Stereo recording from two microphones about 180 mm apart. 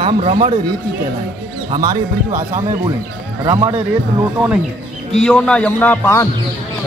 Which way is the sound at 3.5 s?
15° right (ahead or behind).